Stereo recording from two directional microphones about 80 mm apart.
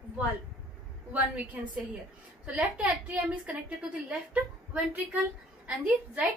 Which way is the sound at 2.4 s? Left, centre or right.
Centre.